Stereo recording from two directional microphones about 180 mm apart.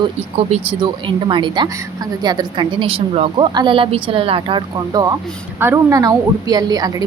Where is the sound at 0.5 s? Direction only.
30° right (ahead or behind).